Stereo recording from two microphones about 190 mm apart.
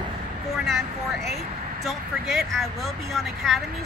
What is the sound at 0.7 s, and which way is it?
Speech, centre (ahead or behind).